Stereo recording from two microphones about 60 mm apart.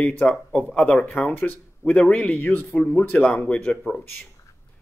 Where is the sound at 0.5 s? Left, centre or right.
Left.